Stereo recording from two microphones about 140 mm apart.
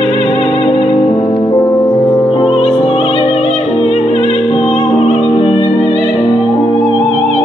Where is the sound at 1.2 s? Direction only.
25° left (ahead or behind).